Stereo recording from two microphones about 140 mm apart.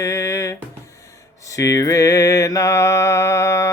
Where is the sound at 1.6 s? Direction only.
25° left (ahead or behind).